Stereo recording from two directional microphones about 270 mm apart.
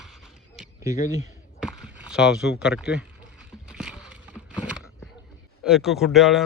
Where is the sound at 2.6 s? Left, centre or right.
Centre.